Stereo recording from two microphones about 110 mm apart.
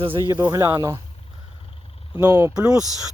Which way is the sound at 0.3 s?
20° right (ahead or behind).